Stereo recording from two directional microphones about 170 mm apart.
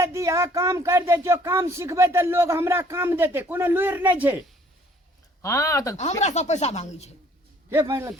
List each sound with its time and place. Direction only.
0.0 s speech: 15° right (ahead or behind)
5.4 s speech: 20° left (ahead or behind)
6.0 s speech: 40° left (ahead or behind)
7.7 s speech: 15° right (ahead or behind)